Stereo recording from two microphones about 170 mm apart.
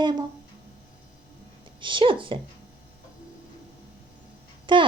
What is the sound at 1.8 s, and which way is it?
Speech, 30° right (ahead or behind).